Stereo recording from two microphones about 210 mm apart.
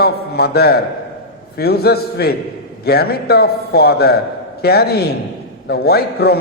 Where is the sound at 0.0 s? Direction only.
50° left (ahead or behind).